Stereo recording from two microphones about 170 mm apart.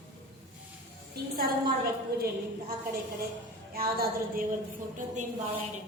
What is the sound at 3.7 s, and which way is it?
Speech, 60° right (ahead or behind).